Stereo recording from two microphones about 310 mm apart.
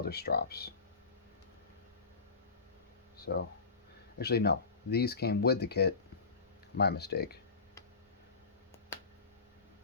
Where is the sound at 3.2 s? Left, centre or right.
Left.